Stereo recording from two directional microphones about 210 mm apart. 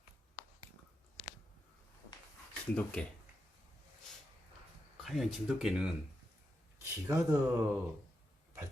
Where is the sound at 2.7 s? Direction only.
5° left (ahead or behind).